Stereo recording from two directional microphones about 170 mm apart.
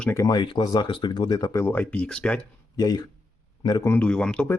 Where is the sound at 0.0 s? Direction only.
15° left (ahead or behind).